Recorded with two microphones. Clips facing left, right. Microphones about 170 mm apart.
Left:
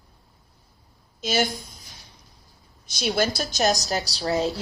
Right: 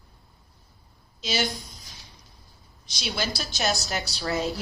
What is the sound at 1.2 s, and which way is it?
Speech, 50° left (ahead or behind).